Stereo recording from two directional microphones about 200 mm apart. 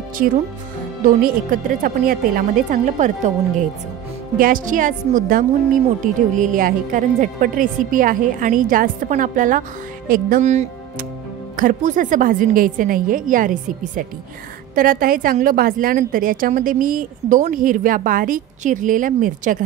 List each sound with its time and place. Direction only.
1.0 s a woman's voice: 45° right (ahead or behind)